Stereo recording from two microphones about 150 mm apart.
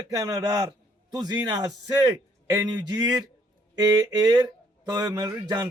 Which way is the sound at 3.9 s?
25° right (ahead or behind).